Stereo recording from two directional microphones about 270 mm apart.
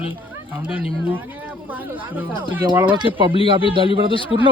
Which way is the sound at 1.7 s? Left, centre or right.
Centre.